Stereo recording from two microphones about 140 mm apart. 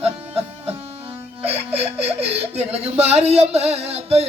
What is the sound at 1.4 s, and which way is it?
Speech, 45° right (ahead or behind).